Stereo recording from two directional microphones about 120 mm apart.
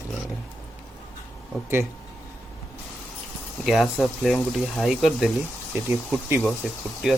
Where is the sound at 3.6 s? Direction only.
Centre (ahead or behind).